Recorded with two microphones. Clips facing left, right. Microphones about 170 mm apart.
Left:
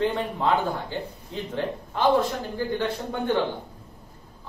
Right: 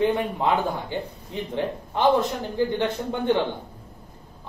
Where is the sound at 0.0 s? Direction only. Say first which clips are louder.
Right 2 dB; 15° right (ahead or behind).